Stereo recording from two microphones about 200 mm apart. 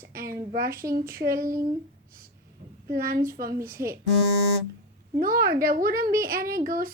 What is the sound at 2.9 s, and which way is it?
Speech, 45° right (ahead or behind).